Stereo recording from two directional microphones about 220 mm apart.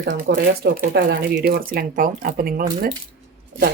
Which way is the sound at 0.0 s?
50° right (ahead or behind).